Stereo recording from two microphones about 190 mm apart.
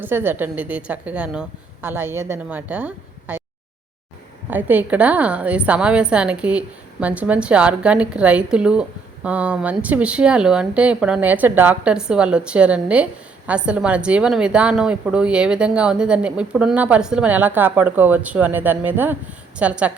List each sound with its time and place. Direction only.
0.0 s a woman's voice: 10° right (ahead or behind)
4.4 s a woman's voice: 10° right (ahead or behind)